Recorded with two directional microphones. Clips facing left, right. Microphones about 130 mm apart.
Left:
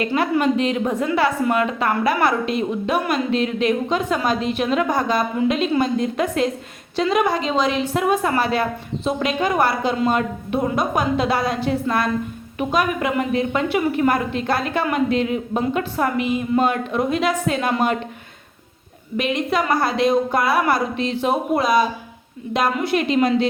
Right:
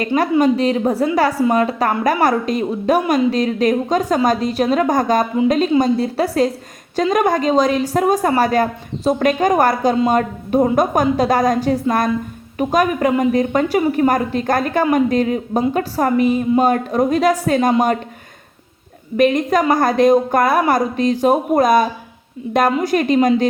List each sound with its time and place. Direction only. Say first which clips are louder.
0.4 s a woman's voice: right 4 dB; 35° right (ahead or behind)
19.1 s speech: right 6 dB; 45° right (ahead or behind)